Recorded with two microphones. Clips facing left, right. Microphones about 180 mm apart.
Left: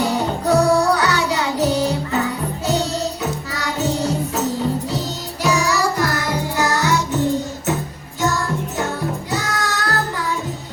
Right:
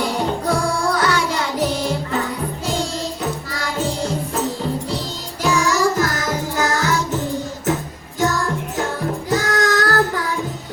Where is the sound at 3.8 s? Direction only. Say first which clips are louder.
Left 3 dB; 45° left (ahead or behind).